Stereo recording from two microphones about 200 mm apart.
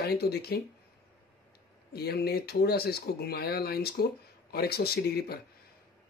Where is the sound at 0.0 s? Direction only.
55° left (ahead or behind).